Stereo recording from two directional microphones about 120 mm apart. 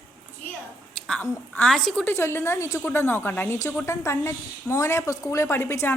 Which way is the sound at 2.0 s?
20° left (ahead or behind).